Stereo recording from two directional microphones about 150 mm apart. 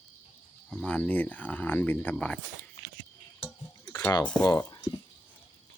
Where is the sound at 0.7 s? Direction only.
10° left (ahead or behind).